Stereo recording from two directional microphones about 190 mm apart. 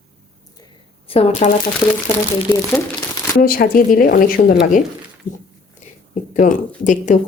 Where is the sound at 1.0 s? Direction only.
30° left (ahead or behind).